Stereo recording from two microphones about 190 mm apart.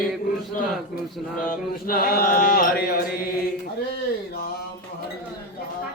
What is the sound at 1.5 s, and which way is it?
Mantra, 50° left (ahead or behind).